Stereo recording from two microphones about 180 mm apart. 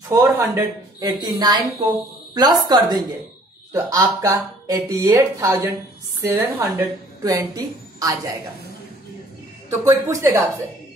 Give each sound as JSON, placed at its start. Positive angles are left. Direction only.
{"t": 0.1, "sound": "a woman's voice", "side_deg": -15}
{"t": 9.7, "sound": "speech", "side_deg": -15}